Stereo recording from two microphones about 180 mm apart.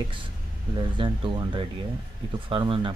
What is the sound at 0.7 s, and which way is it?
Speech, 25° right (ahead or behind).